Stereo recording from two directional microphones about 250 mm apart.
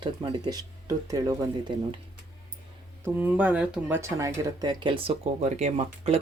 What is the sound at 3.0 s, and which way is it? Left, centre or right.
Speech, centre.